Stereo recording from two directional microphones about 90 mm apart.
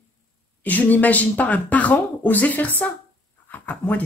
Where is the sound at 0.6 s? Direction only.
20° left (ahead or behind).